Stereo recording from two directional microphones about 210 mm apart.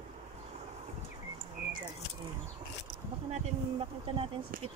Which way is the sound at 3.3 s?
25° right (ahead or behind).